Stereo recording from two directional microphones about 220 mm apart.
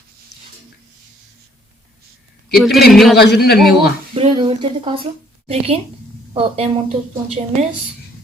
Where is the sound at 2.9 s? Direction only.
Centre (ahead or behind).